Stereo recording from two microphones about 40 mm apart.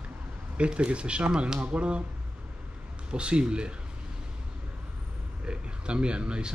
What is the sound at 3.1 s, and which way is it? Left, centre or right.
Speech, right.